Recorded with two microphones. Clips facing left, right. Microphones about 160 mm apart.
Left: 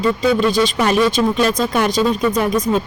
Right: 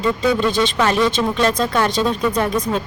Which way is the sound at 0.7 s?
10° left (ahead or behind).